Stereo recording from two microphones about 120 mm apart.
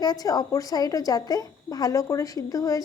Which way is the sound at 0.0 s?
35° left (ahead or behind).